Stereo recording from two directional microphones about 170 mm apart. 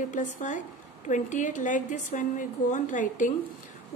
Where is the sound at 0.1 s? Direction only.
45° left (ahead or behind).